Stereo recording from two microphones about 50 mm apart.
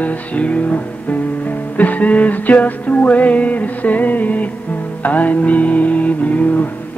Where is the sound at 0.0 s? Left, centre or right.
Left.